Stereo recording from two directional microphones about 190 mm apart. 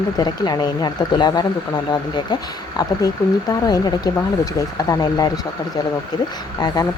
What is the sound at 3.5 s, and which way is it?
Speech, 20° left (ahead or behind).